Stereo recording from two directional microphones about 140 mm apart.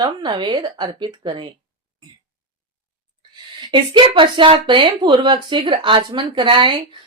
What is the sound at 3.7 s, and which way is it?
A woman's voice, 35° right (ahead or behind).